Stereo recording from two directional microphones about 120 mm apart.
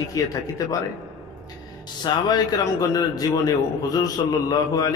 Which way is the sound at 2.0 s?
35° left (ahead or behind).